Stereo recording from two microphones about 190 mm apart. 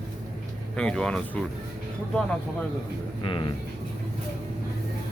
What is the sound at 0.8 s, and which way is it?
Speech, 5° left (ahead or behind).